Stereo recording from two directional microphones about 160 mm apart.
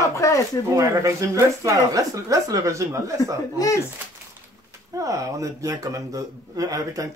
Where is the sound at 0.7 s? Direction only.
20° right (ahead or behind).